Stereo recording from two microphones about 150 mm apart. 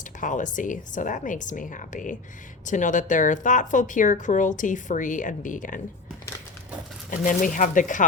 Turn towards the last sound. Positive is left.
turn(degrees=60)  # may be behind; listen again after turning